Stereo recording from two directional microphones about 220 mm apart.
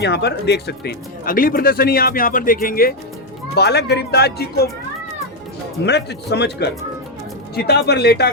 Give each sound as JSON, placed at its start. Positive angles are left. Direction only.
{"t": 0.0, "sound": "speech", "side_deg": 50}
{"t": 5.8, "sound": "speech", "side_deg": 50}